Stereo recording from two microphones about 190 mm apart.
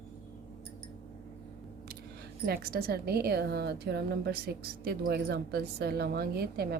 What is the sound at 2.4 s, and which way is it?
A woman's voice, 50° right (ahead or behind).